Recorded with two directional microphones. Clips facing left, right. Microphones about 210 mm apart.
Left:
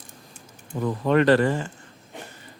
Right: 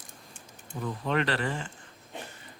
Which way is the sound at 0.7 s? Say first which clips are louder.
Left 8 dB; 90° left.